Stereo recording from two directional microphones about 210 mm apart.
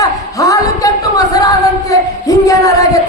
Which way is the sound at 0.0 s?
15° left (ahead or behind).